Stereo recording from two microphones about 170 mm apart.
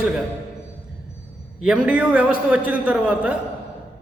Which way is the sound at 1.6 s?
5° right (ahead or behind).